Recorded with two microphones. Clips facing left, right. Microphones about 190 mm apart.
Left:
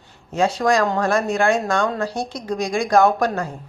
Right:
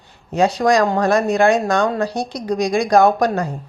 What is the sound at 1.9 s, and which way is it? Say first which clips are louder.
Speech: right 3 dB; 15° right (ahead or behind).